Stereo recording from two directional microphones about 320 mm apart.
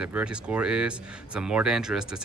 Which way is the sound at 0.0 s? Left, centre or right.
Centre.